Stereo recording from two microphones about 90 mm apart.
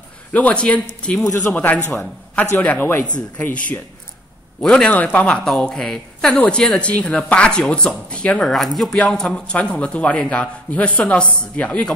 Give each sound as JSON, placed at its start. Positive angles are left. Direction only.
{"t": 0.3, "sound": "a man's voice", "side_deg": 15}